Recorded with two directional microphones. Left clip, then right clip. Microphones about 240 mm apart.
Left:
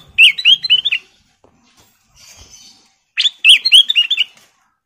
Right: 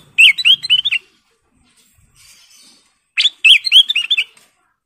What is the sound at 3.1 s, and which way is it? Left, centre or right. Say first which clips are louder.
Bird: even; centre.